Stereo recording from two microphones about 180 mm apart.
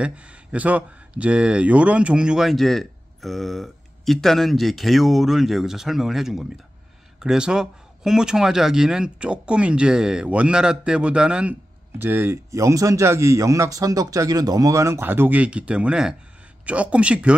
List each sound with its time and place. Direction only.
0.0 s speech: 5° right (ahead or behind)